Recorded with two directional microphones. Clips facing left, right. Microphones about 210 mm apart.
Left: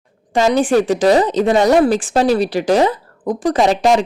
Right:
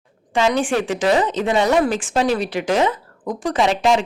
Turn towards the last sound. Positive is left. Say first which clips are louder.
# left 4 dB
turn(degrees=40)  # may be behind; listen again after turning